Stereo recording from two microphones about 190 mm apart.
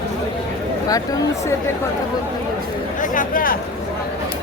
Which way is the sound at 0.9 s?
20° left (ahead or behind).